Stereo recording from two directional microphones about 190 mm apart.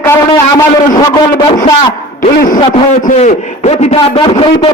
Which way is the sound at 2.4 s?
45° left (ahead or behind).